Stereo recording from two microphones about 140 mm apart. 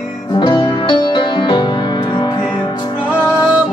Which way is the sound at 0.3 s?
30° left (ahead or behind).